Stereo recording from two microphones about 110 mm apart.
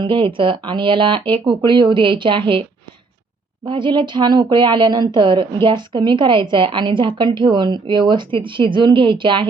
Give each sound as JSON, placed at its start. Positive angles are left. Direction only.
{"t": 0.0, "sound": "a woman's voice", "side_deg": -50}
{"t": 3.7, "sound": "a woman's voice", "side_deg": -45}